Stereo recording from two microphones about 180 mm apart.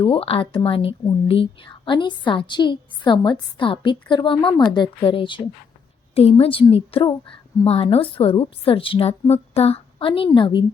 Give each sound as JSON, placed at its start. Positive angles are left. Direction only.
{"t": 0.0, "sound": "a woman's voice", "side_deg": 30}